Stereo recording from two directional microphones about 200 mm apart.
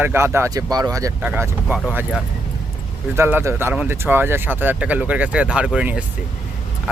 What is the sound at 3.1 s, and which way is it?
Speech, 10° right (ahead or behind).